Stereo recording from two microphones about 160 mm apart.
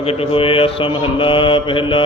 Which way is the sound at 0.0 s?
35° left (ahead or behind).